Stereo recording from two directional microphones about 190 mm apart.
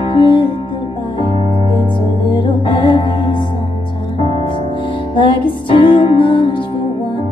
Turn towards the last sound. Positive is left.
turn(degrees=25)  # may be behind; listen again after turning